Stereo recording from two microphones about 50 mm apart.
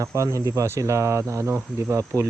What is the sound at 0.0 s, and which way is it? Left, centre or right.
Cricket, right.